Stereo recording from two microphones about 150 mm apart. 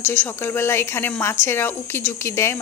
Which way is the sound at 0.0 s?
15° left (ahead or behind).